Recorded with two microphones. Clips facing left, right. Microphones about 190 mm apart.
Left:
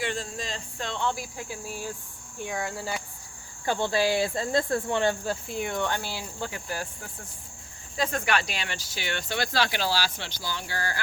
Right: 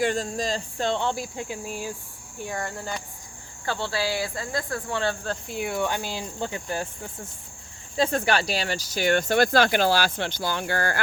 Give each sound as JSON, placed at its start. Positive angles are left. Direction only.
{"t": 0.0, "sound": "speech", "side_deg": -45}
{"t": 2.4, "sound": "speech", "side_deg": 0}
{"t": 3.7, "sound": "speech", "side_deg": 20}
{"t": 5.5, "sound": "speech", "side_deg": -5}